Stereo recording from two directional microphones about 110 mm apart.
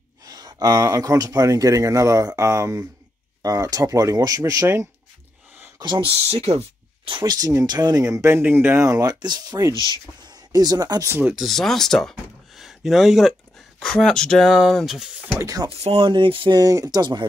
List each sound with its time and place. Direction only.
0.2 s speech: 35° right (ahead or behind)
5.8 s speech: 50° right (ahead or behind)
7.1 s speech: 50° right (ahead or behind)
7.3 s speech: 35° right (ahead or behind); by 8.8 s 20° right (ahead or behind)
8.8 s speech: 35° right (ahead or behind)
11.3 s speech: centre (ahead or behind)
15.3 s speech: 30° right (ahead or behind)
15.7 s speech: 60° right (ahead or behind)
16.5 s speech: 35° right (ahead or behind)